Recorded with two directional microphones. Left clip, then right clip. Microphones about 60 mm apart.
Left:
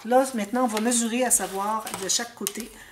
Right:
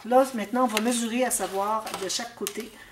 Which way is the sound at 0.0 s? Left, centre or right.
Left.